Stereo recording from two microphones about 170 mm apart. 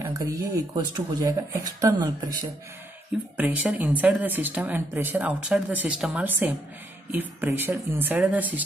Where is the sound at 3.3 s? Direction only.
10° right (ahead or behind).